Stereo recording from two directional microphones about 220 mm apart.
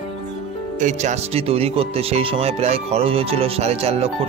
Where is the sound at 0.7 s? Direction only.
35° right (ahead or behind).